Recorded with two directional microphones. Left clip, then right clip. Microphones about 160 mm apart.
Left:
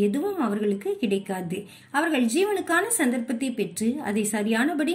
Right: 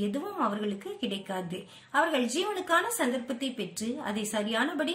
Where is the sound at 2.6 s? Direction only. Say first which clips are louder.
Left 3 dB; 20° left (ahead or behind).